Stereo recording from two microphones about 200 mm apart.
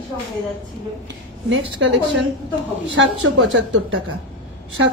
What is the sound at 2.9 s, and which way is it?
A woman's voice, 80° right.